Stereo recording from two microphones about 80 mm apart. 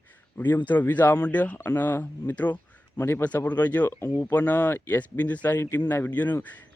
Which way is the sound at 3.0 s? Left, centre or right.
Left.